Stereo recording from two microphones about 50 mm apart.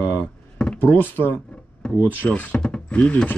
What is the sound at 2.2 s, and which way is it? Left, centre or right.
Speech, centre.